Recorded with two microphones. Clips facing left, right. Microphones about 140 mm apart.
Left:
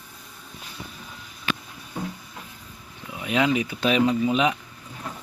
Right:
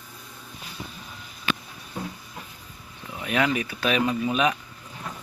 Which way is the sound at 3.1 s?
15° left (ahead or behind).